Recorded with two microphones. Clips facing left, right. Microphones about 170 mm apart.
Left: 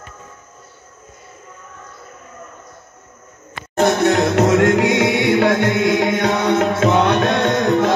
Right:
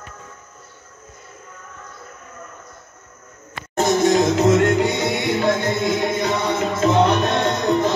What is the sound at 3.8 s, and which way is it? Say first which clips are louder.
Music: left 1 dB; 65° left (ahead or behind).